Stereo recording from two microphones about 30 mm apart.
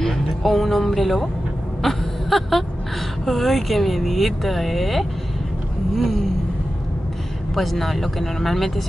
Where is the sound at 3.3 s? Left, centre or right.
Centre.